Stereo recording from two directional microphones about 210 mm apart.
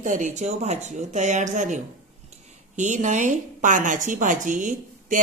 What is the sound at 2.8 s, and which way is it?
A woman's voice, 35° right (ahead or behind).